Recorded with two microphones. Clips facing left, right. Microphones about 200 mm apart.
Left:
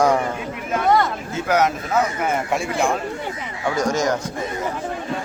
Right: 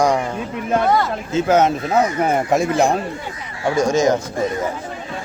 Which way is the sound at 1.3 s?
25° right (ahead or behind).